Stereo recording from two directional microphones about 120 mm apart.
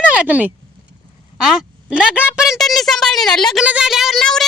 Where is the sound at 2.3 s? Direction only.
5° right (ahead or behind).